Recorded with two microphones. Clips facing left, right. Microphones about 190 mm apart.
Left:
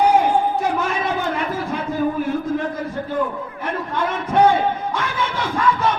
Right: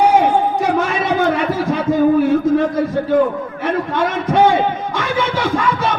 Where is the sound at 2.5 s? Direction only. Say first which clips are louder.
Right 8 dB; 90° right.